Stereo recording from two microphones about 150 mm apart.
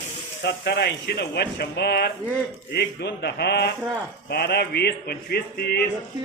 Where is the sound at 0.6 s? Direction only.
90° left.